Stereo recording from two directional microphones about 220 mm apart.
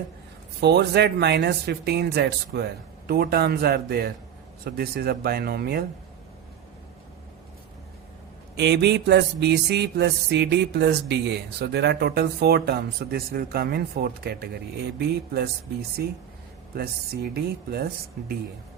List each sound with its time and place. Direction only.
0.6 s music: 50° right (ahead or behind)
8.5 s music: 50° right (ahead or behind)
17.3 s music: 45° right (ahead or behind)